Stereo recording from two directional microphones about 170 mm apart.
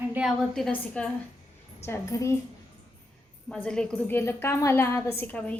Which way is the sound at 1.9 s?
20° left (ahead or behind).